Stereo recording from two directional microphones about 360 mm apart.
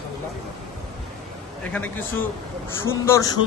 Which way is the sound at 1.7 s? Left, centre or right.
Centre.